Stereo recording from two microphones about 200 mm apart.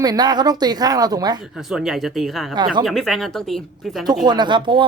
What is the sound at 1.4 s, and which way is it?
Speech, centre (ahead or behind).